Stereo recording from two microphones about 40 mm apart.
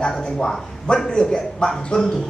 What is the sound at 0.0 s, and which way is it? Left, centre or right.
Speech, left.